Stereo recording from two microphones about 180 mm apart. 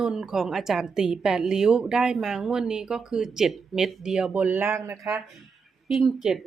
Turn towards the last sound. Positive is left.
turn(degrees=0)  # may be behind; listen again after turning